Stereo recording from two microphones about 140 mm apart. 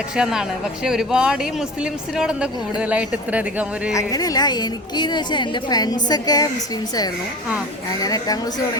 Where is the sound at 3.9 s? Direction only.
25° left (ahead or behind).